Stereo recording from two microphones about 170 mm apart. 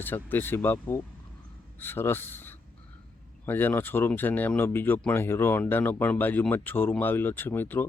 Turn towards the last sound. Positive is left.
turn(degrees=10)  # may be behind; listen again after turning